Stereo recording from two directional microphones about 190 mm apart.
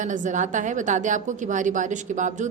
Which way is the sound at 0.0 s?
40° right (ahead or behind).